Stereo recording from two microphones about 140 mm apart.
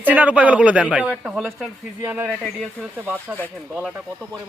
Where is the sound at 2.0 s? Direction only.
10° right (ahead or behind).